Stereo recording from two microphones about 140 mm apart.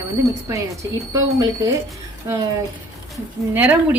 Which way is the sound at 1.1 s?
25° right (ahead or behind).